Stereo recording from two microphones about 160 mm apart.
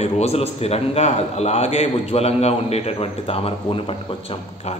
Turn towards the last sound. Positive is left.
turn(degrees=35)  # may be behind; listen again after turning